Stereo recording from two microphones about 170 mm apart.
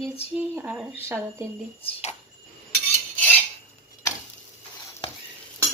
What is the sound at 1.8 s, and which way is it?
Speech, 40° left (ahead or behind).